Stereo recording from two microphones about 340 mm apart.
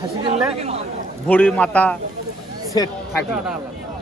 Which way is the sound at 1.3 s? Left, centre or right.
Centre.